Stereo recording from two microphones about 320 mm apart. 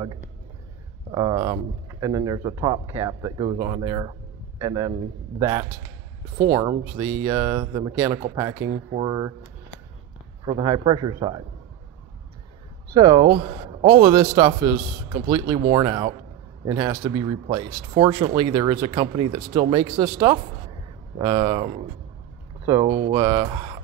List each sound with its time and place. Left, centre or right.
1.1 s speech: centre
10.4 s speech: centre
12.9 s speech: centre